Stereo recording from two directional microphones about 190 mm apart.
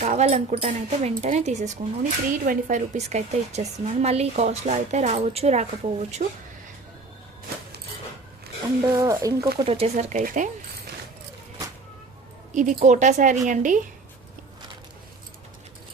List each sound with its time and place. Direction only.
0.0 s a woman's voice: 40° right (ahead or behind)
8.6 s speech: 20° right (ahead or behind)
9.6 s a woman's voice: 30° right (ahead or behind)
12.5 s a woman's voice: 40° right (ahead or behind)